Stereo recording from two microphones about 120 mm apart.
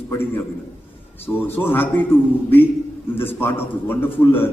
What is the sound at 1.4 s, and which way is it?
Speech, 20° left (ahead or behind).